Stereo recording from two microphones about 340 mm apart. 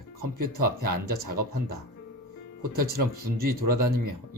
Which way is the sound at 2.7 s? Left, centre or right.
Right.